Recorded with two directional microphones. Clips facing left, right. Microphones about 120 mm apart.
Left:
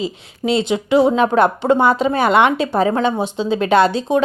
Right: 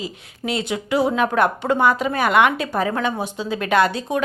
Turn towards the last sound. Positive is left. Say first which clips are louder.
# left 5 dB
turn(degrees=25)  # may be behind; listen again after turning